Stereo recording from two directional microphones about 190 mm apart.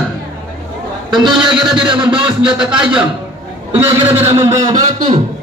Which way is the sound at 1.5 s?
25° right (ahead or behind).